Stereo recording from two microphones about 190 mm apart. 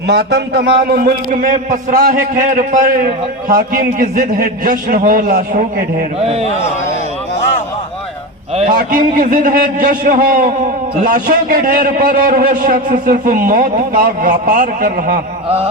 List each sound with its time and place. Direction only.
0.1 s a man's voice: 60° right (ahead or behind)
6.2 s speech: 35° right (ahead or behind)
8.7 s a man's voice: 45° right (ahead or behind)